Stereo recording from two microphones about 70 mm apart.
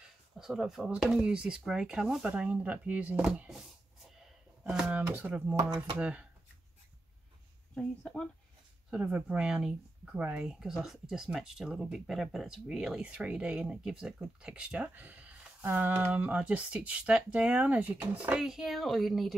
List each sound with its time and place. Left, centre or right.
0.4 s speech: centre
1.2 s speech: centre
4.6 s speech: centre
7.7 s speech: centre
8.9 s speech: centre
10.6 s speech: centre; by 18.4 s right
18.4 s speech: centre